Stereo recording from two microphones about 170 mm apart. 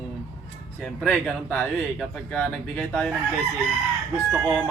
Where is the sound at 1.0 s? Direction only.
5° left (ahead or behind).